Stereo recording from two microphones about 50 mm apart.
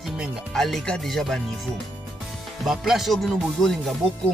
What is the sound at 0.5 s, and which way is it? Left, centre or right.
Music, centre.